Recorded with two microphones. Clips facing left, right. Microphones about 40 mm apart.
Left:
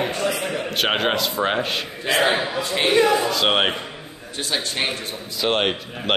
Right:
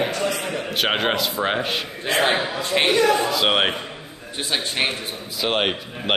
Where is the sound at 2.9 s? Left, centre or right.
Left.